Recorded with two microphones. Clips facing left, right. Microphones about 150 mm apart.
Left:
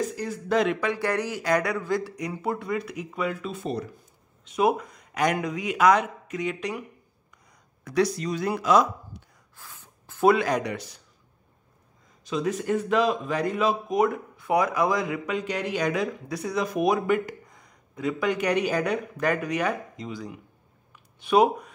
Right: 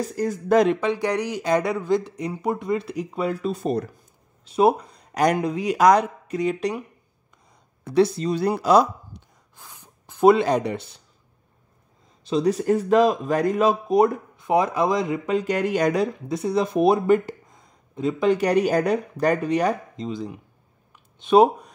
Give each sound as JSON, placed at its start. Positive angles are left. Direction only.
{"t": 0.0, "sound": "speech", "side_deg": -45}
{"t": 0.7, "sound": "speech", "side_deg": -20}
{"t": 4.5, "sound": "speech", "side_deg": -30}
{"t": 7.8, "sound": "speech", "side_deg": -30}
{"t": 9.1, "sound": "a sound", "side_deg": -20}
{"t": 12.3, "sound": "speech", "side_deg": -35}
{"t": 14.3, "sound": "speech", "side_deg": -25}
{"t": 15.4, "sound": "speech", "side_deg": -45}
{"t": 16.3, "sound": "speech", "side_deg": -25}
{"t": 20.1, "sound": "speech", "side_deg": -25}